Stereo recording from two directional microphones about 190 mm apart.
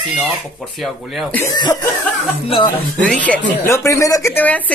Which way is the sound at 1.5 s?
20° left (ahead or behind).